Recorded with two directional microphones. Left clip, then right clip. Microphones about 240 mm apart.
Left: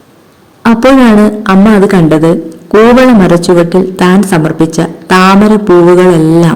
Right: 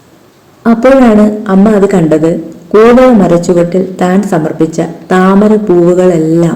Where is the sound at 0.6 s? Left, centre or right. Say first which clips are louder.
Even; left.